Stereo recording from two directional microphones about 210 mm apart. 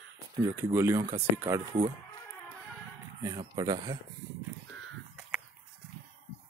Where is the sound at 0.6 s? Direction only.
10° right (ahead or behind).